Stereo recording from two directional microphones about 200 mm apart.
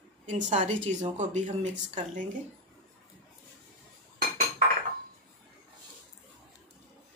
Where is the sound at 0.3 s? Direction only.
35° right (ahead or behind).